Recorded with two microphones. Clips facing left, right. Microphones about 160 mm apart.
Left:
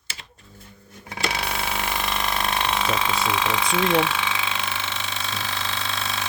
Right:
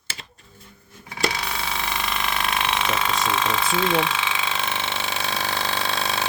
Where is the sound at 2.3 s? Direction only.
Centre (ahead or behind).